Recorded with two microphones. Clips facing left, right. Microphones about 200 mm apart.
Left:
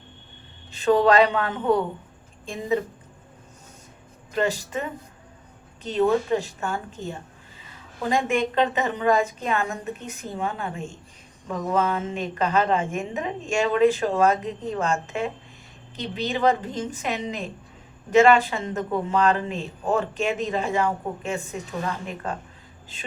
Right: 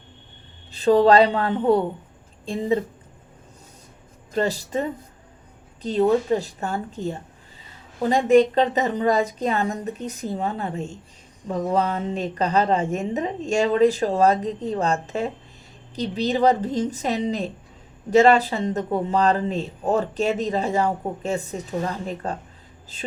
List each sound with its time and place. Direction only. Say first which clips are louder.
0.7 s speech: right 3 dB; 35° right (ahead or behind)
4.4 s speech: right 2 dB; 35° right (ahead or behind)